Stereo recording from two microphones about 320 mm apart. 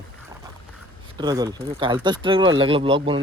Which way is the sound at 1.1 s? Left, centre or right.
Centre.